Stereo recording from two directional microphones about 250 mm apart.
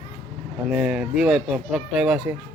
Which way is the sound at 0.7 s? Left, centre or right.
Centre.